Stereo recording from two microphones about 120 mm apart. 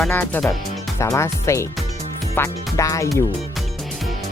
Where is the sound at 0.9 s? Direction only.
25° left (ahead or behind).